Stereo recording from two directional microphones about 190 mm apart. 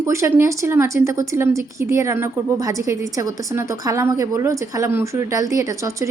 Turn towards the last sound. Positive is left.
turn(degrees=-15)  # may be behind; listen again after turning